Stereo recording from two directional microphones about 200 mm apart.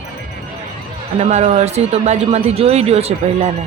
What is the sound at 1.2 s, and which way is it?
Speech, 35° right (ahead or behind).